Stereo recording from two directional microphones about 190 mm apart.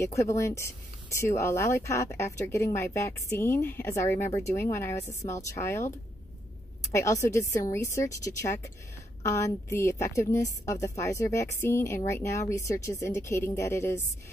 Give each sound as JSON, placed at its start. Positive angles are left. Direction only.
{"t": 0.0, "sound": "speech", "side_deg": 15}